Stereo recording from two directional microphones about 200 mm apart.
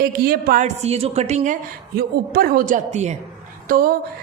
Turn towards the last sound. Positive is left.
turn(degrees=-45)  # may be behind; listen again after turning